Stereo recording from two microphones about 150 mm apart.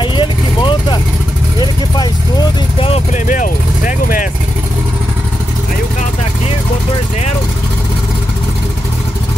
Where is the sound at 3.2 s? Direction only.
60° left (ahead or behind).